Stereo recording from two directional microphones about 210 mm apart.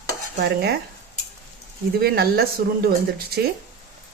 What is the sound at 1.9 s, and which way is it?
Speech, 50° right (ahead or behind).